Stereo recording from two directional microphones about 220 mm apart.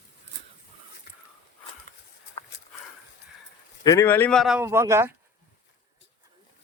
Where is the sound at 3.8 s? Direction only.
15° left (ahead or behind).